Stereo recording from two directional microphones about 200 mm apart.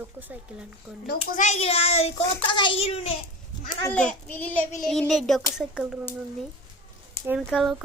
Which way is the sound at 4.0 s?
5° left (ahead or behind).